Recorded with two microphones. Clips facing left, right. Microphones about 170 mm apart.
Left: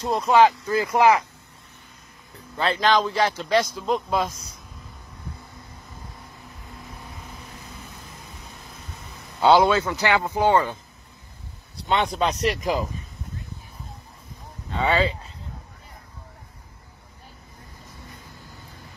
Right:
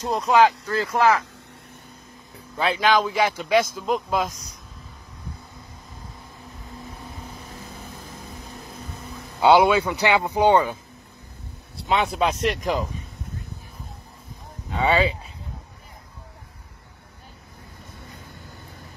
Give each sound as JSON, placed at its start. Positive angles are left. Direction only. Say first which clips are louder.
{"t": 0.0, "sound": "speech", "louder": "left 1 dB", "side_deg": 0}
{"t": 2.5, "sound": "speech", "louder": "even", "side_deg": -5}
{"t": 9.4, "sound": "speech", "louder": "right 1 dB", "side_deg": -15}
{"t": 11.9, "sound": "speech", "louder": "right 1 dB", "side_deg": 0}
{"t": 14.7, "sound": "speech", "louder": "right 1 dB", "side_deg": -15}